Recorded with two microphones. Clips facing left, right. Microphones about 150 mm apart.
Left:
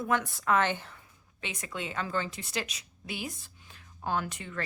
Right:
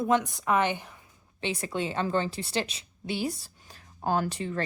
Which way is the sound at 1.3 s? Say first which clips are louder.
Right 8 dB; 30° right (ahead or behind).